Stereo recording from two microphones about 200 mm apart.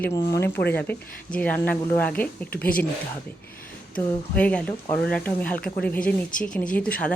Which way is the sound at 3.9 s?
5° left (ahead or behind).